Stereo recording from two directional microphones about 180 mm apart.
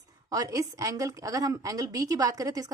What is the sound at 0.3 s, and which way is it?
A woman's voice, 20° right (ahead or behind).